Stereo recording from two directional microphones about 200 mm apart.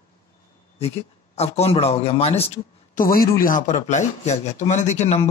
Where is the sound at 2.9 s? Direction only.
45° left (ahead or behind).